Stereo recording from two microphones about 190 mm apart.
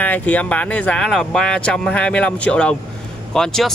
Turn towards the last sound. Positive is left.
turn(degrees=5)  # may be behind; listen again after turning